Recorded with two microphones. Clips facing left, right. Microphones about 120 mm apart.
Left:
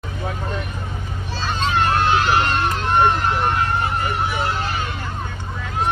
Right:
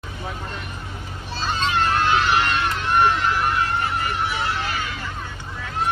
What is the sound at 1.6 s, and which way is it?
Vehicle, 45° left (ahead or behind).